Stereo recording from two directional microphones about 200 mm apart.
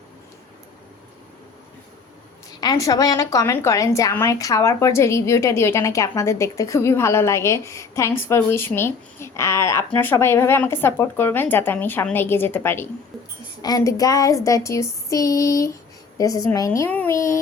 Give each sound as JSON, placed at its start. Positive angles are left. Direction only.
{"t": 2.6, "sound": "a woman's voice", "side_deg": 20}